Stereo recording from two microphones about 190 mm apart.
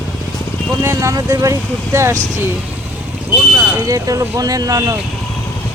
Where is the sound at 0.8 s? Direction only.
15° right (ahead or behind).